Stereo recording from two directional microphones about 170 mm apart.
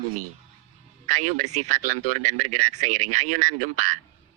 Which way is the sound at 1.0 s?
45° right (ahead or behind).